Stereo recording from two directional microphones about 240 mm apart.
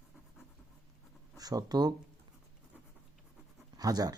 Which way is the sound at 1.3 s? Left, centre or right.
Centre.